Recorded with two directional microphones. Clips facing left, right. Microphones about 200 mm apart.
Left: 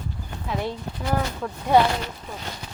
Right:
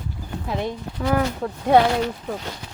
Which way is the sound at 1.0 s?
90° right.